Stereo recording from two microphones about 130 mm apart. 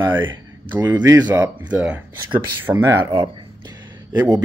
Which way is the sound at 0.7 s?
15° right (ahead or behind).